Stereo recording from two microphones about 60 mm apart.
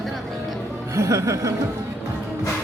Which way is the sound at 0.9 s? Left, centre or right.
Right.